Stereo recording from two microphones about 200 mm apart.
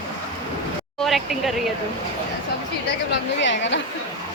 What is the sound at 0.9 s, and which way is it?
Speech, centre (ahead or behind).